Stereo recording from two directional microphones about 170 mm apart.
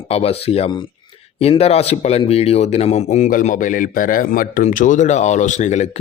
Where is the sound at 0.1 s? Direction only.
35° left (ahead or behind).